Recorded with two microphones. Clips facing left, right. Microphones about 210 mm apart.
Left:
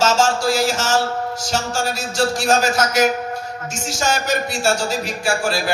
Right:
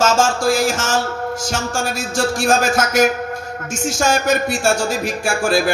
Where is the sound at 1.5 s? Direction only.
50° right (ahead or behind).